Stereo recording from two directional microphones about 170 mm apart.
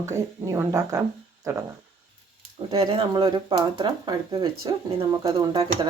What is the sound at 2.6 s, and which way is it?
Speech, 35° right (ahead or behind).